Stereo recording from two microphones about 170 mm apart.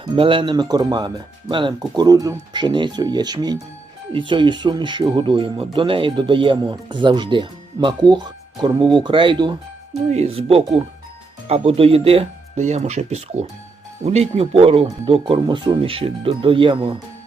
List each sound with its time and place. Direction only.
0.0 s speech: 30° right (ahead or behind)
10.1 s speech: 40° right (ahead or behind)